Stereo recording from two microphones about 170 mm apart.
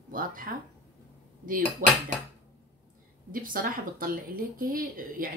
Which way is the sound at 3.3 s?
55° right (ahead or behind).